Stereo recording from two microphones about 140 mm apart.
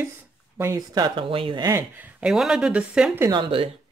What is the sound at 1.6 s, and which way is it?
Speech, 15° right (ahead or behind).